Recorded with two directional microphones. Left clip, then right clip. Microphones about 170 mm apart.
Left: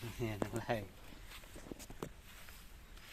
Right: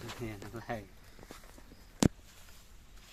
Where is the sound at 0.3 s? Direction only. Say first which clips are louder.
Left 5 dB; 50° left (ahead or behind).